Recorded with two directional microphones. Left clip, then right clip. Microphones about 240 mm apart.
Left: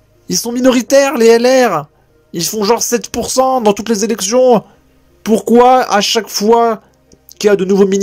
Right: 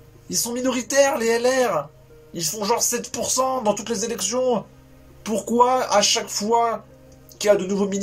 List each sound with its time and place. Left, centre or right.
0.3 s speech: left